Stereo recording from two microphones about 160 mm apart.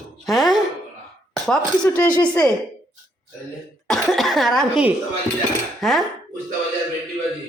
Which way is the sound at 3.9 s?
Centre (ahead or behind).